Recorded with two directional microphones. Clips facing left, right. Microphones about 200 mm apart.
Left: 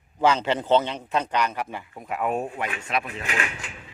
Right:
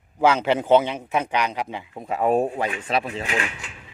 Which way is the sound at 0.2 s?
10° right (ahead or behind).